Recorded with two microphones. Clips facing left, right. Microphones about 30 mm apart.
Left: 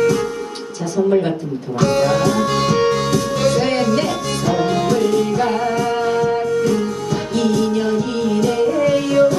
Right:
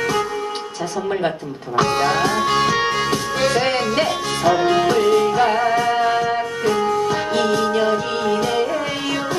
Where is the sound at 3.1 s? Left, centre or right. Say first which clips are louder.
Left 2 dB; right.